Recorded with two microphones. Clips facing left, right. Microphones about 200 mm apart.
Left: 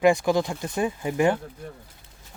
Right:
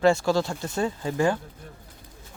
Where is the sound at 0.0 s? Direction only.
15° left (ahead or behind).